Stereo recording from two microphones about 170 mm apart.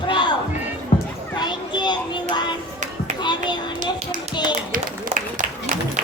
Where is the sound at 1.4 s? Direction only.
25° left (ahead or behind).